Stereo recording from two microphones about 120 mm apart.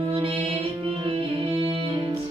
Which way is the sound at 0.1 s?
45° right (ahead or behind).